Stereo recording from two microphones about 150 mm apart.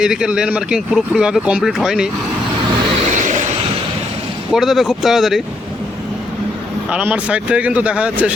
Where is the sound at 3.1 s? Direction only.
55° right (ahead or behind).